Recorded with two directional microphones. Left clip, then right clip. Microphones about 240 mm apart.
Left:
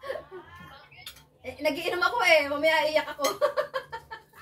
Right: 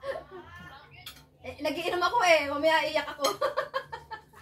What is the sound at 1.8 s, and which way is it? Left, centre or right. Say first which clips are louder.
Speech: right 2 dB; centre.